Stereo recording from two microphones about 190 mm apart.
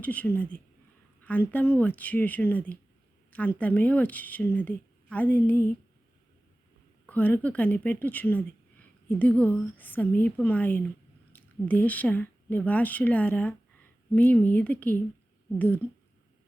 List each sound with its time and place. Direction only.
0.0 s speech: 10° left (ahead or behind)
7.1 s speech: 10° left (ahead or behind)